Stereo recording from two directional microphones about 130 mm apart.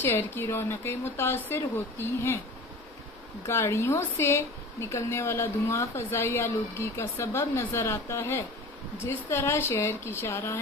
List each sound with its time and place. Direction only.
0.0 s speech: 15° left (ahead or behind)
3.4 s a woman's voice: 20° left (ahead or behind)